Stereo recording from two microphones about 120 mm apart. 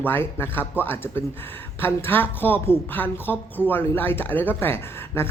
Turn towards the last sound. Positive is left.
turn(degrees=20)  # may be behind; listen again after turning